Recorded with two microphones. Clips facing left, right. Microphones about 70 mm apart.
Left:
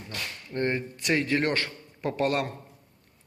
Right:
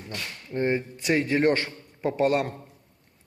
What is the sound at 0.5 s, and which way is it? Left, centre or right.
A man's voice, centre.